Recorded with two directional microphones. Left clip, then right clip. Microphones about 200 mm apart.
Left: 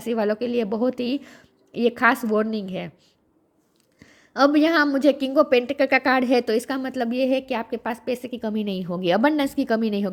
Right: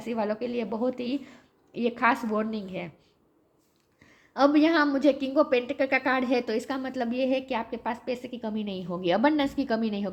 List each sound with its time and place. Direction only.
0.0 s a woman's voice: 45° left (ahead or behind)
4.0 s a woman's voice: 45° left (ahead or behind)